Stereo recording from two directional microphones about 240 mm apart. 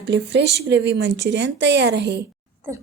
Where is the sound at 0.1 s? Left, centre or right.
Right.